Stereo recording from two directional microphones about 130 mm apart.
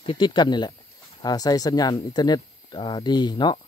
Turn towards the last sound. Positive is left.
turn(degrees=35)  # may be behind; listen again after turning